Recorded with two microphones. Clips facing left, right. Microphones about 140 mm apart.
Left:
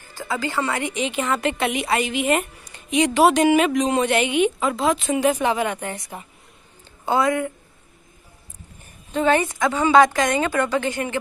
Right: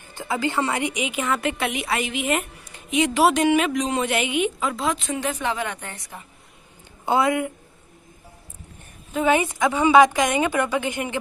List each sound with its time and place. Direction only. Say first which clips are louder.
0.1 s a woman's voice: right 1 dB; 20° right (ahead or behind); by 5.9 s 15° left (ahead or behind)
7.1 s a woman's voice: even; 20° right (ahead or behind)
9.1 s a woman's voice: left 1 dB; 10° right (ahead or behind)